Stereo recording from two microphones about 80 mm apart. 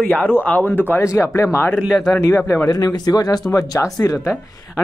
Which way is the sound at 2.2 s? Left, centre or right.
Left.